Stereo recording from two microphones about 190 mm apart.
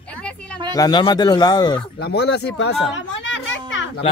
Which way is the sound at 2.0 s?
60° left (ahead or behind).